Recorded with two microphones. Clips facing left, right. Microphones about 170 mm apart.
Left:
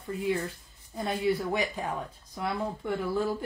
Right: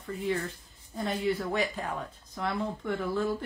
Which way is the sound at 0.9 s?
10° left (ahead or behind).